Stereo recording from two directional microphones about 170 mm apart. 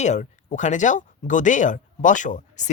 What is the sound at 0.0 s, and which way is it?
Speech, 45° left (ahead or behind).